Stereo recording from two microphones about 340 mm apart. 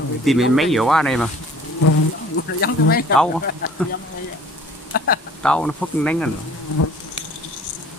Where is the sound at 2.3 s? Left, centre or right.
Left.